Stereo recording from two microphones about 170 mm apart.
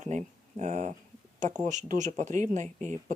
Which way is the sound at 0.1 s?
45° right (ahead or behind).